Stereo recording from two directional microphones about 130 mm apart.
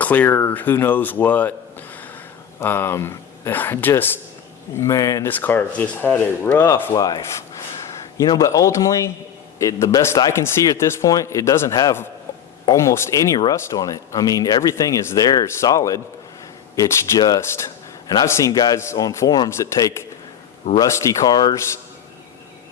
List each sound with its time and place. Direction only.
0.0 s speech: 10° left (ahead or behind)
2.6 s speech: 20° left (ahead or behind)
4.8 s speech: 25° left (ahead or behind)
5.3 s speech: 15° left (ahead or behind)
6.9 s rub: 30° left (ahead or behind)
8.2 s speech: 25° left (ahead or behind)